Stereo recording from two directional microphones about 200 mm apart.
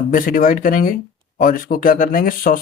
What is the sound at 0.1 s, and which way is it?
Speech, 45° left (ahead or behind).